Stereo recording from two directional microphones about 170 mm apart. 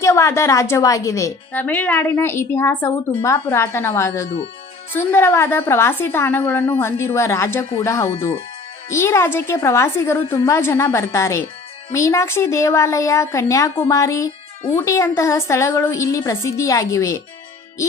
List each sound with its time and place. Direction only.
0.0 s a woman's voice: 15° left (ahead or behind)